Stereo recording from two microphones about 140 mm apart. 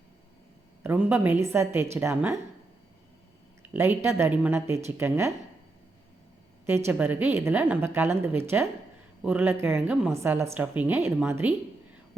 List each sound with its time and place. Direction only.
0.8 s a woman's voice: 15° right (ahead or behind)
3.6 s a woman's voice: 15° right (ahead or behind)
6.7 s a woman's voice: 15° right (ahead or behind)